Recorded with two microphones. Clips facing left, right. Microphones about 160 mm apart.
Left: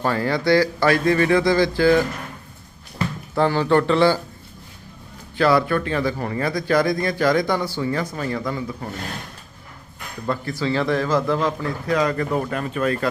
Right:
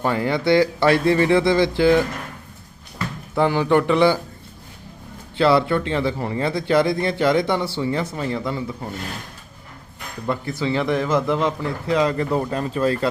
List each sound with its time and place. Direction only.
0.0 s speech: 20° right (ahead or behind)
3.3 s a man's voice: 15° right (ahead or behind)
5.4 s speech: 25° right (ahead or behind)
10.2 s speech: 20° right (ahead or behind)